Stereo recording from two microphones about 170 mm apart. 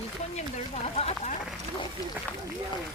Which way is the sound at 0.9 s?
40° left (ahead or behind).